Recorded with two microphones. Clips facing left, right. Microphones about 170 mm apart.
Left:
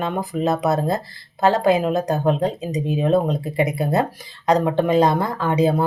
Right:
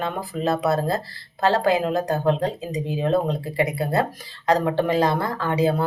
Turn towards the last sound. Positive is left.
turn(degrees=20)  # may be behind; listen again after turning